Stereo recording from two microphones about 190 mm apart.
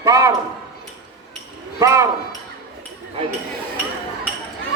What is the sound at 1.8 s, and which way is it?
Speech, 15° right (ahead or behind).